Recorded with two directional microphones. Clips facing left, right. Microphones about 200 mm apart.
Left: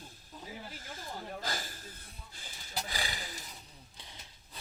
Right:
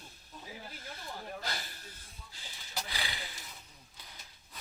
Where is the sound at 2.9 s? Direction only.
45° left (ahead or behind).